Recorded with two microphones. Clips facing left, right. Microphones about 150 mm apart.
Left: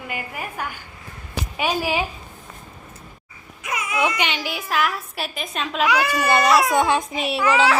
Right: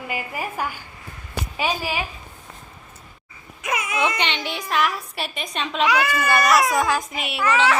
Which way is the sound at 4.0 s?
5° left (ahead or behind).